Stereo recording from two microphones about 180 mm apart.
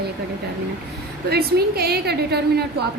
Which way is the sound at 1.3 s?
60° right (ahead or behind).